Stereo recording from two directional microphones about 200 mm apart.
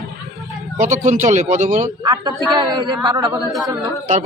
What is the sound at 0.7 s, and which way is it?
A man's voice, 35° right (ahead or behind).